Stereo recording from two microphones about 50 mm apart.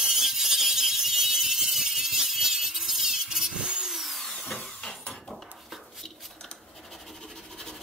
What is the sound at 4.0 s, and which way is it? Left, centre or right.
Drill, centre.